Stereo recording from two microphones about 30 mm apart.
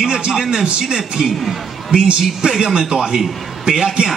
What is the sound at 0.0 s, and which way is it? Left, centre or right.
A man's voice, centre.